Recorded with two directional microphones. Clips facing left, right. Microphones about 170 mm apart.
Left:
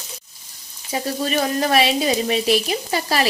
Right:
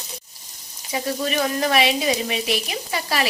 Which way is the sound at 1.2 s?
35° left (ahead or behind).